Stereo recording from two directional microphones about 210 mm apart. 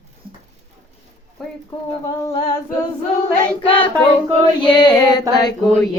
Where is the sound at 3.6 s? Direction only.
25° left (ahead or behind).